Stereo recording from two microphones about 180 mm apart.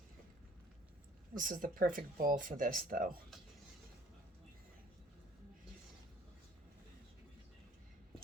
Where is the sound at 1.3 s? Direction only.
50° right (ahead or behind).